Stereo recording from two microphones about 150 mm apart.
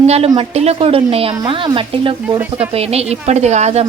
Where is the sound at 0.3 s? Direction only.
45° right (ahead or behind).